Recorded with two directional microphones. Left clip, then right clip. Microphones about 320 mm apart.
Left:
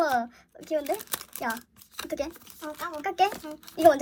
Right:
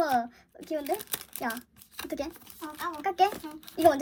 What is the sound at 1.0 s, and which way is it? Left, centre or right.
Crumpling, centre.